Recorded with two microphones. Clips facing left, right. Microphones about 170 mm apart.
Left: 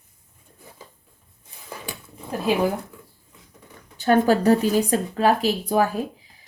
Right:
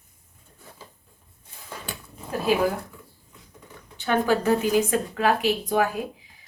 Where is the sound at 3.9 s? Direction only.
40° left (ahead or behind).